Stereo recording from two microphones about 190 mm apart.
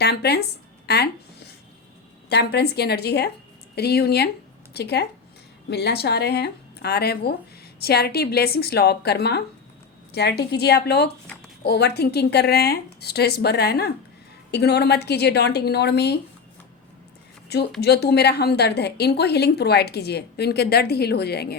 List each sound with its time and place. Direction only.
0.0 s a woman's voice: 60° left (ahead or behind)
2.3 s a woman's voice: 60° left (ahead or behind)
17.7 s a woman's voice: 60° left (ahead or behind)